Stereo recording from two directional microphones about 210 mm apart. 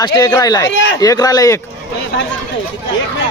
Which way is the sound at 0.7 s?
60° left (ahead or behind).